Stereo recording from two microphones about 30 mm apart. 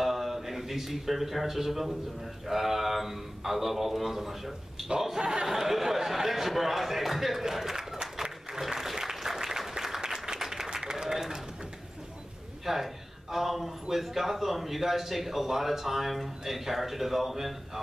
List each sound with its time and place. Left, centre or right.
0.0 s a man's voice: centre
8.5 s applause: centre
12.6 s a sound: centre
13.8 s speech: centre